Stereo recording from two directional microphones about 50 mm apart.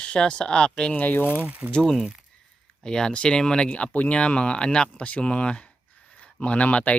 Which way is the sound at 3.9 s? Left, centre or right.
Left.